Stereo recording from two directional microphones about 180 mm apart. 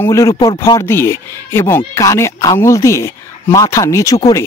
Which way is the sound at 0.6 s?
15° left (ahead or behind).